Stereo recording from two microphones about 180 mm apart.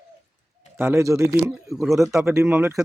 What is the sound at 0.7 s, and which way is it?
A woman's voice, 15° right (ahead or behind).